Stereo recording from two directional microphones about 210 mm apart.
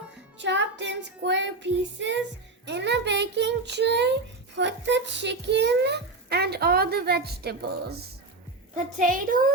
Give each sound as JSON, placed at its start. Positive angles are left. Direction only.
{"t": 0.3, "sound": "music", "side_deg": -60}
{"t": 2.6, "sound": "speech", "side_deg": -55}
{"t": 9.0, "sound": "a woman's voice", "side_deg": -40}